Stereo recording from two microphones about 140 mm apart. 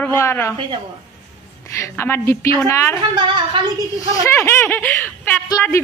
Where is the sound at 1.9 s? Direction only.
15° left (ahead or behind).